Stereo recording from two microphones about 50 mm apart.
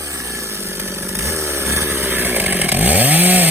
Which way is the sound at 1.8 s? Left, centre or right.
Right.